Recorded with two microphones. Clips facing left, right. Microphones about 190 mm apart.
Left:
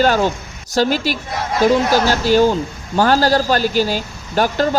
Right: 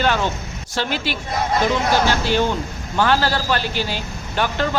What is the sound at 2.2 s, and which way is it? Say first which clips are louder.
A man's voice: left 6 dB; 40° left (ahead or behind).